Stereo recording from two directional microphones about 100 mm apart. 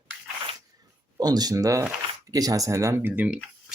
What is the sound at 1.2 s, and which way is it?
Speech, 40° right (ahead or behind).